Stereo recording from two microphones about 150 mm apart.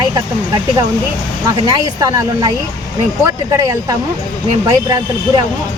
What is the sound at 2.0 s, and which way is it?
Speech, 25° right (ahead or behind).